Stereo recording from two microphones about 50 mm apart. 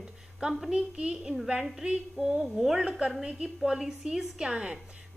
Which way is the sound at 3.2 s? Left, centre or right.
Centre.